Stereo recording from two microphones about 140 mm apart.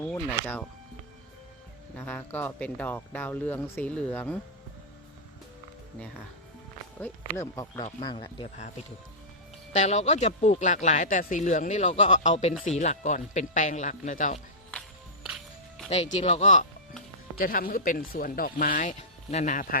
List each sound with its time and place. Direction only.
0.0 s speech: 15° left (ahead or behind)
2.0 s speech: 10° left (ahead or behind)
7.0 s speech: 20° left (ahead or behind)
8.0 s speech: 35° left (ahead or behind)
8.5 s speech: 55° left (ahead or behind)
15.9 s speech: 50° left (ahead or behind)
17.3 s speech: 90° left; by 19.6 s 55° left (ahead or behind)